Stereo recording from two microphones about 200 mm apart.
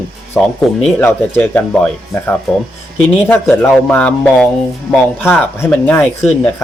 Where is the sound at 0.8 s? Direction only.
10° left (ahead or behind).